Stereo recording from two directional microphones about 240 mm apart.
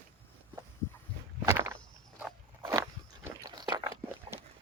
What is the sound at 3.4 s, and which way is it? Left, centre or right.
Crunch, centre.